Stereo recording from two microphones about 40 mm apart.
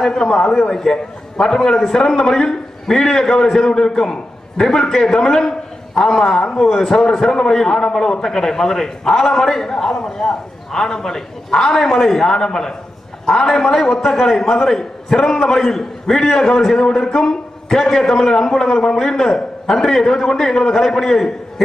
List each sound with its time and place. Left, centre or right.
0.0 s a man's voice: centre